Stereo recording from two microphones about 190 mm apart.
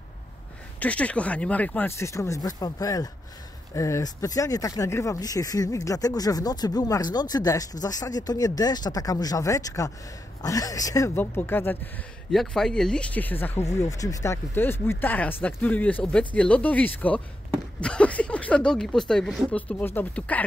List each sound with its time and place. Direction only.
0.7 s speech: 5° left (ahead or behind)